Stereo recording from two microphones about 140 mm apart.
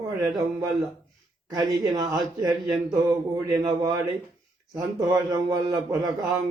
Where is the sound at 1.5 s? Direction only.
30° right (ahead or behind).